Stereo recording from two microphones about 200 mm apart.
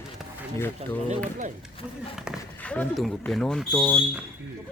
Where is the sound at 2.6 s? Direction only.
5° left (ahead or behind).